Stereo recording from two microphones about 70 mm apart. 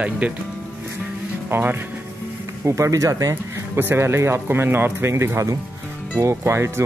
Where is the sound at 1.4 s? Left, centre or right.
Right.